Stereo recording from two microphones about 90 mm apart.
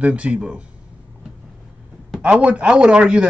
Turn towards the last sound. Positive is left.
turn(degrees=-10)  # may be behind; listen again after turning